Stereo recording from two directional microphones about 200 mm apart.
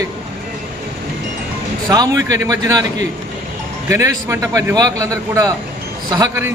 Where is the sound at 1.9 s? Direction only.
15° right (ahead or behind).